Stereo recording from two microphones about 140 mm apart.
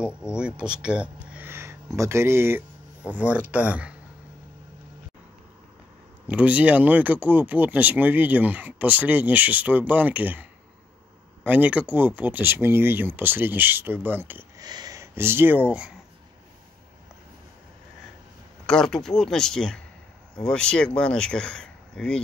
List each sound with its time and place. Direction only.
0.0 s speech: 5° right (ahead or behind)
6.2 s speech: 10° right (ahead or behind)
11.4 s speech: 10° right (ahead or behind)
14.6 s speech: 30° right (ahead or behind); by 15.9 s 10° right (ahead or behind)
18.7 s speech: 5° left (ahead or behind)